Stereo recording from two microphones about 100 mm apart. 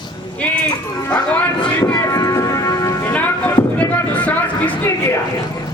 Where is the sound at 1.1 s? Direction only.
15° left (ahead or behind).